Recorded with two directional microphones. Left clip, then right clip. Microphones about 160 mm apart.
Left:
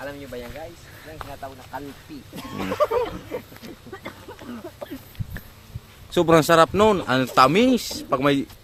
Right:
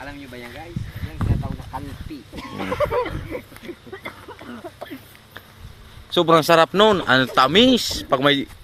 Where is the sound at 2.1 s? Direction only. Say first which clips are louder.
Right 4 dB; 40° left (ahead or behind).